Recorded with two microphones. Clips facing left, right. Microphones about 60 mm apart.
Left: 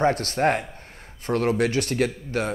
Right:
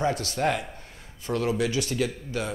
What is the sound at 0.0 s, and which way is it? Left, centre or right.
Speech, left.